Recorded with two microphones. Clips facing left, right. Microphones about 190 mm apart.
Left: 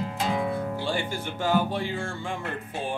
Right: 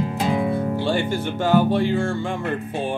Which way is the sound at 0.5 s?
25° right (ahead or behind).